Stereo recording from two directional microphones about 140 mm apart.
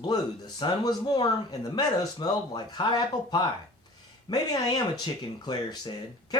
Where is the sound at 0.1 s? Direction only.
30° left (ahead or behind).